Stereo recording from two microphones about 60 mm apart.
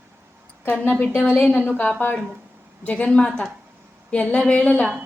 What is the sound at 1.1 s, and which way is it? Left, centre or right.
Speech, left.